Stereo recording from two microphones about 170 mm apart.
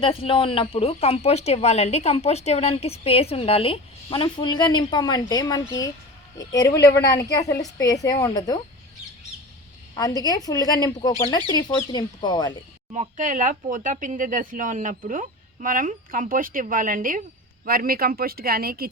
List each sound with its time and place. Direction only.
0.0 s a woman's voice: 30° left (ahead or behind)
9.9 s a woman's voice: 20° left (ahead or behind)
12.9 s speech: 45° right (ahead or behind); by 18.9 s 60° right (ahead or behind)